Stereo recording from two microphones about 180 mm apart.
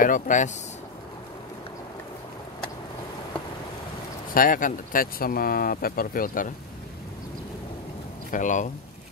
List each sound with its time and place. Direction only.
0.0 s speech: 45° left (ahead or behind)
4.3 s speech: 50° left (ahead or behind)
8.3 s speech: 45° left (ahead or behind)